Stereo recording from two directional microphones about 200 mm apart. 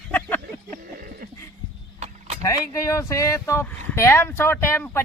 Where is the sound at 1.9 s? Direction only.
35° right (ahead or behind).